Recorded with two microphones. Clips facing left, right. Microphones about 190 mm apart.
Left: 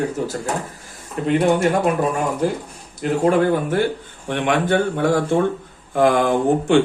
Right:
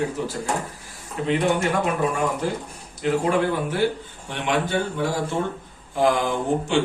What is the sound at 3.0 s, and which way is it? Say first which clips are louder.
Speech: left 4 dB; 50° left (ahead or behind).